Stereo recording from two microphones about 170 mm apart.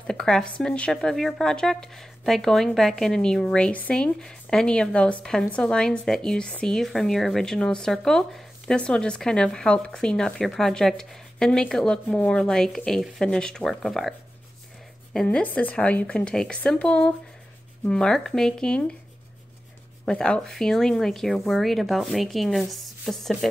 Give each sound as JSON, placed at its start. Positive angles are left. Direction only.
{"t": 0.0, "sound": "speech", "side_deg": 5}
{"t": 15.1, "sound": "speech", "side_deg": 10}
{"t": 20.1, "sound": "speech", "side_deg": 5}